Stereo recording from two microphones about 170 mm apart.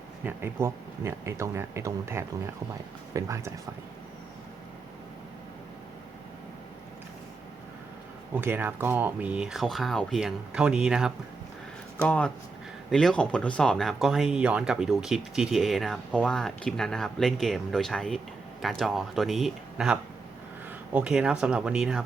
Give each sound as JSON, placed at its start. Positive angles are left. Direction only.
{"t": 0.3, "sound": "speech", "side_deg": -15}
{"t": 8.4, "sound": "speech", "side_deg": -10}
{"t": 12.0, "sound": "speech", "side_deg": 5}